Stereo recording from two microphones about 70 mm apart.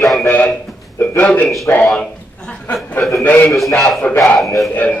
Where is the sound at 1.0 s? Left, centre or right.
Left.